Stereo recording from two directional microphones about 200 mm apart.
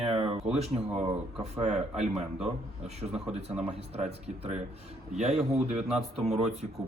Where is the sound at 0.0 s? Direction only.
30° right (ahead or behind).